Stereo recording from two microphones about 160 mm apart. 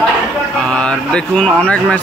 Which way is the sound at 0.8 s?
5° left (ahead or behind).